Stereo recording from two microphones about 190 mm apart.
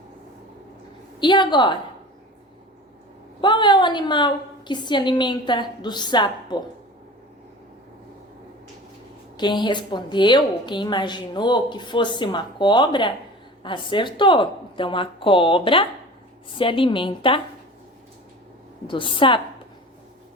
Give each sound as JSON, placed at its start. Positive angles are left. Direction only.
{"t": 1.2, "sound": "a woman's voice", "side_deg": 25}
{"t": 3.4, "sound": "a woman's voice", "side_deg": 25}
{"t": 9.4, "sound": "a woman's voice", "side_deg": 25}
{"t": 18.9, "sound": "a woman's voice", "side_deg": 25}